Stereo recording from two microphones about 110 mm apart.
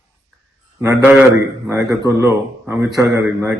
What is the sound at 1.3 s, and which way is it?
A man's voice, 30° right (ahead or behind).